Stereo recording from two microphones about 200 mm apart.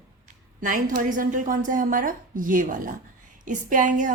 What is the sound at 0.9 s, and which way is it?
A woman's voice, 40° right (ahead or behind).